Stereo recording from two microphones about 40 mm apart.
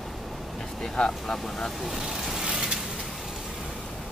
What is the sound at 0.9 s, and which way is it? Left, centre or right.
Speech, centre.